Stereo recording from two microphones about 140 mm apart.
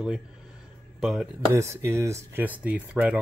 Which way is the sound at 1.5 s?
20° right (ahead or behind).